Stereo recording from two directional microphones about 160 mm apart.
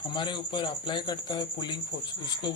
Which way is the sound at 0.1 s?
30° left (ahead or behind).